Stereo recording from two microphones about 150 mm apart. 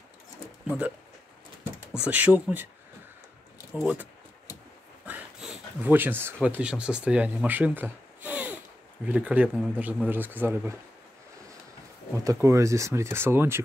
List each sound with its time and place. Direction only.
0.7 s speech: 10° right (ahead or behind)
2.0 s speech: 10° right (ahead or behind)
3.7 s speech: 10° right (ahead or behind)
12.3 s speech: 20° right (ahead or behind)